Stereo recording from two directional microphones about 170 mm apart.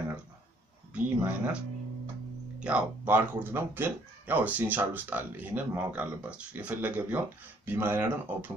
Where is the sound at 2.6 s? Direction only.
10° right (ahead or behind).